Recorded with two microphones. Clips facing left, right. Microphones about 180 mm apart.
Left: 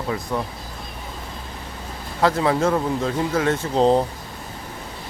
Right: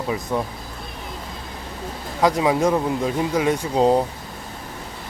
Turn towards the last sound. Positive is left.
turn(degrees=-10)  # may be behind; listen again after turning